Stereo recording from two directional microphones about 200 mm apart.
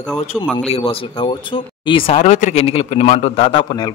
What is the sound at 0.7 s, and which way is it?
Speech, 30° left (ahead or behind).